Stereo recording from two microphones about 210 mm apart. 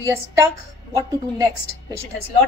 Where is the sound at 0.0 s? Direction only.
15° right (ahead or behind).